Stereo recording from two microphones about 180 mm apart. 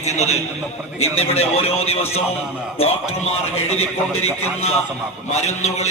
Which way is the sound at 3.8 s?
35° left (ahead or behind).